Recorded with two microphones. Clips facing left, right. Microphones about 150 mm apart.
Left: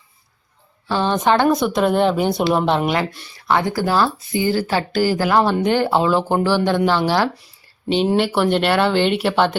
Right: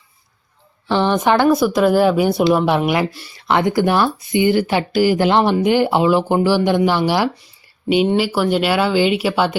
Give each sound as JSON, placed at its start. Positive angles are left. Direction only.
{"t": 0.9, "sound": "speech", "side_deg": -15}
{"t": 8.0, "sound": "speech", "side_deg": 0}